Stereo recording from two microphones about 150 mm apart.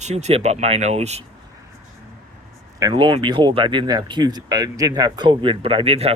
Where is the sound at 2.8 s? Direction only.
30° right (ahead or behind).